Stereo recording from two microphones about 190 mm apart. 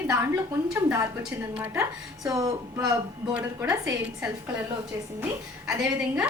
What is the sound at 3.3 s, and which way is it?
A woman's voice, 5° right (ahead or behind).